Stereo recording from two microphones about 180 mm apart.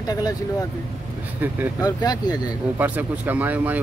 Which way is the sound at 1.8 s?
20° left (ahead or behind).